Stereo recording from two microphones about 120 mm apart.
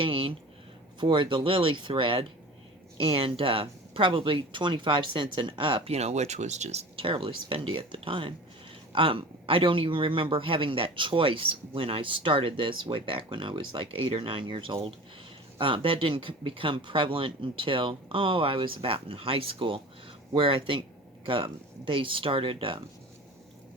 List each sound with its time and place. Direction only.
0.0 s a sound: 45° right (ahead or behind)
0.9 s a man's voice: 40° right (ahead or behind); by 6.8 s 70° right (ahead or behind)
6.9 s a man's voice: 45° right (ahead or behind)